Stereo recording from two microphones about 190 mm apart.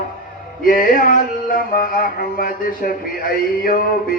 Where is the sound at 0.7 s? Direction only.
45° left (ahead or behind).